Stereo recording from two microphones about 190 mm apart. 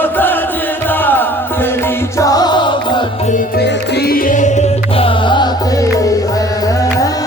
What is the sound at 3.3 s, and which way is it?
Music, 45° left (ahead or behind).